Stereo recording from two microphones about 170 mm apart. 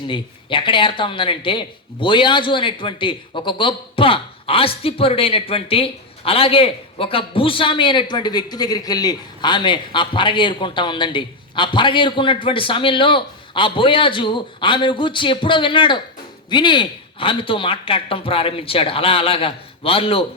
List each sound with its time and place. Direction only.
0.1 s speech: 30° left (ahead or behind)